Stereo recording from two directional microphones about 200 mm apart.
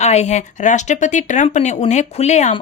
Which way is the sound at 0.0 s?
35° left (ahead or behind).